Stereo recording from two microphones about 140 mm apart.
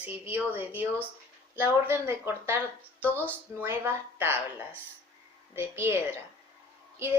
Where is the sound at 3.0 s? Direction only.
15° left (ahead or behind).